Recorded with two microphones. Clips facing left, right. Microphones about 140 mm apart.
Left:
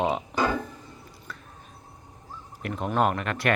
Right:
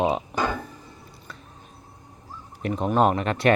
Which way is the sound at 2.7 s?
15° right (ahead or behind).